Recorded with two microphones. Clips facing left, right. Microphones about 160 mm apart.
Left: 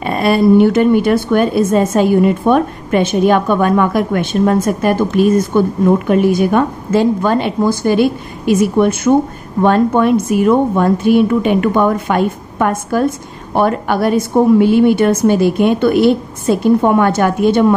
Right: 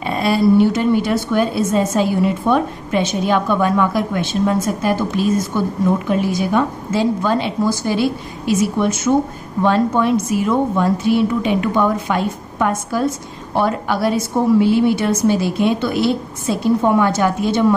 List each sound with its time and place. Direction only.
0.0 s a woman's voice: 55° left (ahead or behind)